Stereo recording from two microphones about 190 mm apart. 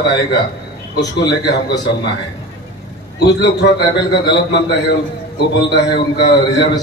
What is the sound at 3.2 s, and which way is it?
A man's voice, 60° left (ahead or behind).